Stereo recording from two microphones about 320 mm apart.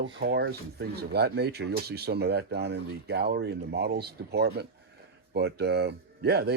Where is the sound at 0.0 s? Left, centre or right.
Right.